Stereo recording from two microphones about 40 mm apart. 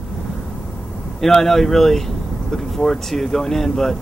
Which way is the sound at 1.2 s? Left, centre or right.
Centre.